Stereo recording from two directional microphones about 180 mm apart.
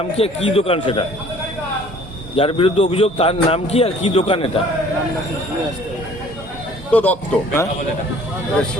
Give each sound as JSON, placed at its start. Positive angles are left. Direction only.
{"t": 0.2, "sound": "a man's voice", "side_deg": 35}
{"t": 2.3, "sound": "a man's voice", "side_deg": 30}
{"t": 6.9, "sound": "a man's voice", "side_deg": 10}